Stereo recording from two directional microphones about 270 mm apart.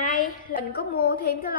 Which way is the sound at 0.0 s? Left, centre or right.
Left.